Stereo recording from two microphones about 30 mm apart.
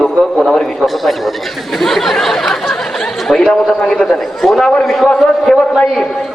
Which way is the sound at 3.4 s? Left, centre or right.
Centre.